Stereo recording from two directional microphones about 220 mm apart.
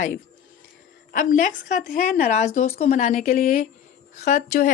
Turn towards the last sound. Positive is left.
turn(degrees=40)  # may be behind; listen again after turning